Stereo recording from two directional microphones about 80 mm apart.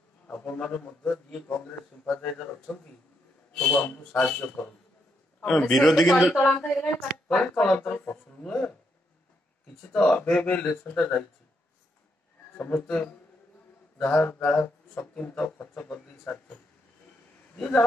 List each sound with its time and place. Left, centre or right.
0.3 s a man's voice: centre
9.9 s speech: centre
12.8 s a man's voice: centre
17.6 s speech: centre